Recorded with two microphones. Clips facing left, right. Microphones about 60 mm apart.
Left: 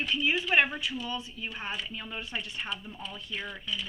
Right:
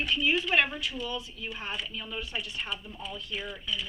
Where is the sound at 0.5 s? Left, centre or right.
Centre.